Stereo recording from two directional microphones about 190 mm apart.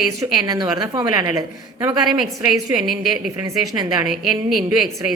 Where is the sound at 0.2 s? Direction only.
20° right (ahead or behind).